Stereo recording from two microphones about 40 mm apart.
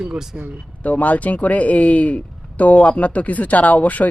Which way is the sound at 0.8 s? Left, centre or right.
Left.